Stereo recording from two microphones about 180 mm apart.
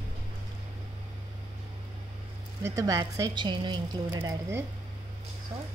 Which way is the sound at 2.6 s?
15° right (ahead or behind).